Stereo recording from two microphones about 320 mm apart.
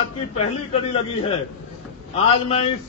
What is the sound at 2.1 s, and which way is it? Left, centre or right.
Speech, centre.